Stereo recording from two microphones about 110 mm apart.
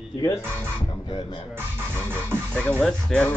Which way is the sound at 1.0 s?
40° left (ahead or behind).